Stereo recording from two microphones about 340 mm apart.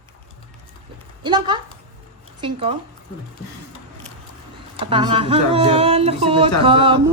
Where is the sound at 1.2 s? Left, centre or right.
Centre.